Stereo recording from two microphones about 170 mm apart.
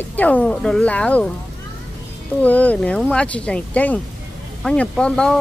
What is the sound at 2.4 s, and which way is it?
Speech, 10° left (ahead or behind).